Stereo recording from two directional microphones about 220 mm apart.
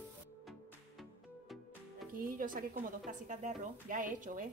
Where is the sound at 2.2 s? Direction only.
40° right (ahead or behind).